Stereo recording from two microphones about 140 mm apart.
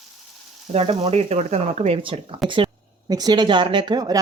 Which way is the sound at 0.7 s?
45° right (ahead or behind).